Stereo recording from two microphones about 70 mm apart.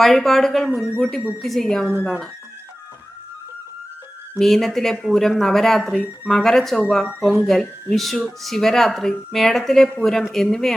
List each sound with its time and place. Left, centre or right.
0.0 s speech: centre
4.4 s speech: centre